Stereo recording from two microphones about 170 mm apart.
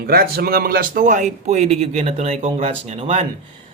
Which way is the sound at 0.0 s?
60° right (ahead or behind).